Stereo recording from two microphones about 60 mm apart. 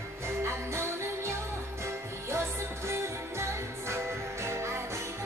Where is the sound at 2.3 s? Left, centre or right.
Right.